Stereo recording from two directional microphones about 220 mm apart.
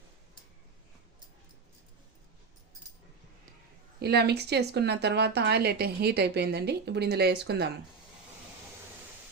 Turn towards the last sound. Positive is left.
turn(degrees=-50)  # may be behind; listen again after turning